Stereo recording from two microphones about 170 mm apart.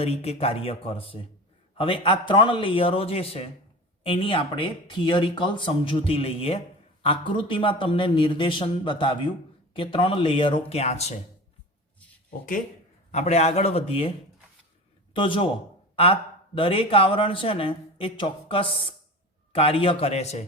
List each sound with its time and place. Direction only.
0.0 s speech: 35° left (ahead or behind)
13.1 s speech: 40° left (ahead or behind)
15.1 s a man's voice: 30° left (ahead or behind)
16.6 s speech: 30° left (ahead or behind)